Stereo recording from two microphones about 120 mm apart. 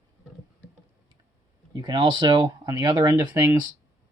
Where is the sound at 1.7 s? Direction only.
40° right (ahead or behind).